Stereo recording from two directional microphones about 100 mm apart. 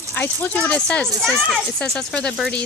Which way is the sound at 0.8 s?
10° left (ahead or behind).